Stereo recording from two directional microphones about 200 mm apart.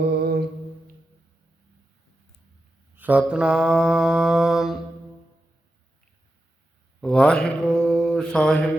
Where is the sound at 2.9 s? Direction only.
10° right (ahead or behind).